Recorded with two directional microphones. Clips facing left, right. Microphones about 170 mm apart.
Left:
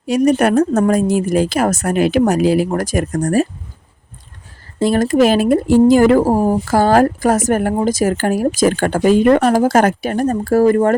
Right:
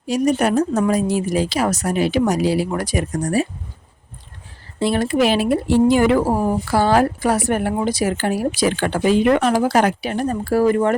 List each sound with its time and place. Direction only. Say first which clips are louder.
0.1 s speech: left 4 dB; 60° left (ahead or behind)
4.8 s speech: left 5 dB; 45° left (ahead or behind)